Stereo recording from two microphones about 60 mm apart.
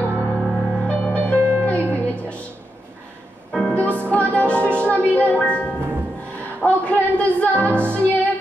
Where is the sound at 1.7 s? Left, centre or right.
Left.